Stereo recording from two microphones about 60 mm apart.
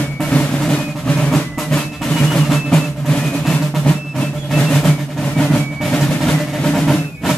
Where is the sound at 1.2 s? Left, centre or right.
Centre.